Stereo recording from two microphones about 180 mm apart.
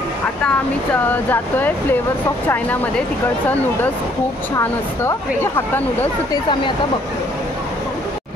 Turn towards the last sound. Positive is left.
turn(degrees=15)  # may be behind; listen again after turning